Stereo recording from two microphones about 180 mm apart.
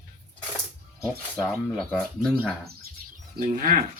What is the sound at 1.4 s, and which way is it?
Speech, centre (ahead or behind).